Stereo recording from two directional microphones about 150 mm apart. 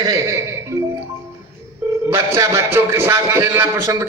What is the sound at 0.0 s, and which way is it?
Speech, 25° right (ahead or behind).